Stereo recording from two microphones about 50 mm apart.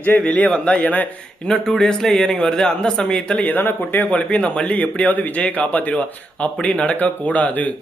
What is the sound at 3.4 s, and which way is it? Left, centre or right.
Speech, left.